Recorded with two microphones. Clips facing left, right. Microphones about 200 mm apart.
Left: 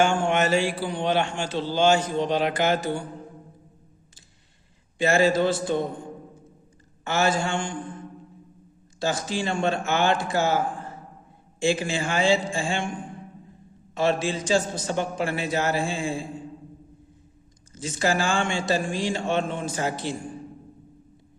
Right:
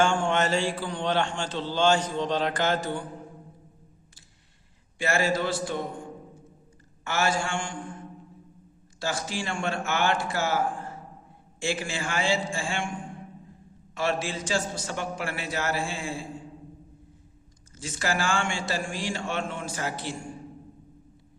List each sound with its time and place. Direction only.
0.0 s a man's voice: 10° left (ahead or behind)
4.9 s a man's voice: 20° left (ahead or behind)
7.0 s a man's voice: 20° left (ahead or behind)
9.0 s a man's voice: 20° left (ahead or behind)
11.6 s a man's voice: 20° left (ahead or behind)
13.9 s a man's voice: 20° left (ahead or behind)
17.7 s a man's voice: 20° left (ahead or behind)